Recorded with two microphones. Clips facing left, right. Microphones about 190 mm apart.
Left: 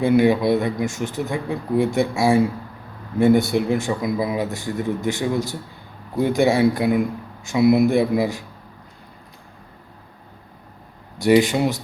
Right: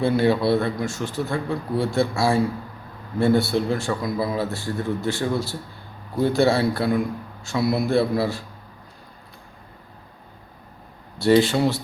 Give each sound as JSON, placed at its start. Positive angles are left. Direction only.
{"t": 0.0, "sound": "a man's voice", "side_deg": 15}
{"t": 11.2, "sound": "a man's voice", "side_deg": 15}